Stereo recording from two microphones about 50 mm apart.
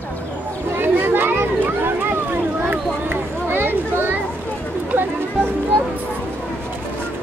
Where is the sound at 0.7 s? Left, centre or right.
Right.